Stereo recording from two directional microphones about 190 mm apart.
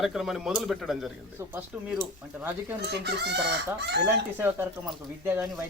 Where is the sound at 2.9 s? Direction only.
60° right (ahead or behind).